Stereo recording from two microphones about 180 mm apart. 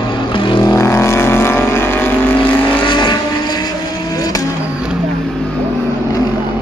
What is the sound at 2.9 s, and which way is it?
Vehicle, 25° left (ahead or behind).